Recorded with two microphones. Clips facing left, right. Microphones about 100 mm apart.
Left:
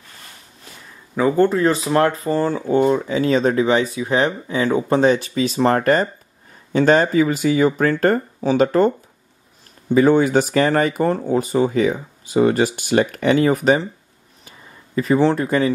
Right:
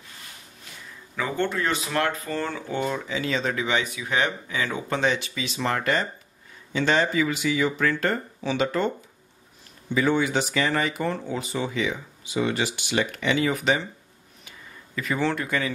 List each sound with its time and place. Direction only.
1.1 s speech: 35° left (ahead or behind)
15.0 s speech: 35° left (ahead or behind)